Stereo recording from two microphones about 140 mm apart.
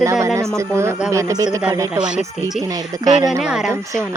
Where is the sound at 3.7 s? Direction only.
20° right (ahead or behind).